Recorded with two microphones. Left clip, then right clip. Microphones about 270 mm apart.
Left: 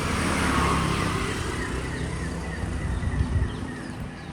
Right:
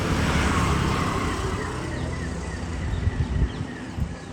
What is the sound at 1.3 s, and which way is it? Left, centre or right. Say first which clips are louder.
Vehicle: right 2 dB; right.